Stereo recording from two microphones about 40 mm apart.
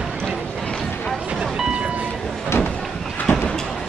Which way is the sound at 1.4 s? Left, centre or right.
Right.